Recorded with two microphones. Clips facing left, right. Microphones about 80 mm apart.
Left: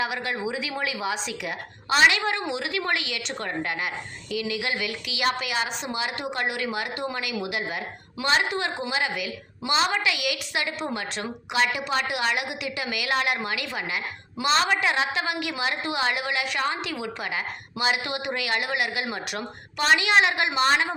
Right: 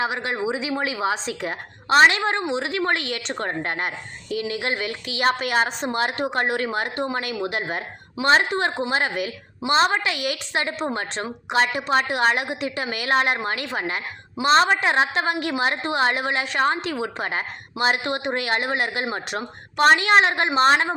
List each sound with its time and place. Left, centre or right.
0.0 s a woman's voice: right